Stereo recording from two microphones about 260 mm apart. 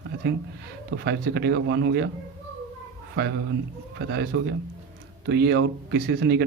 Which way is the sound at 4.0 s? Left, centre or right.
Right.